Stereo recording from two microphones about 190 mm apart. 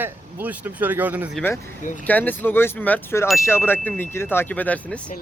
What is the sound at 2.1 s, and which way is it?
Speech, 10° left (ahead or behind).